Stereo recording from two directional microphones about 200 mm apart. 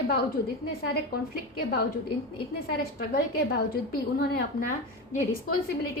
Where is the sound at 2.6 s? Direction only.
50° left (ahead or behind).